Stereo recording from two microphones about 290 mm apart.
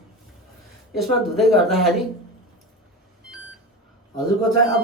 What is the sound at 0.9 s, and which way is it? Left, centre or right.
Speech, centre.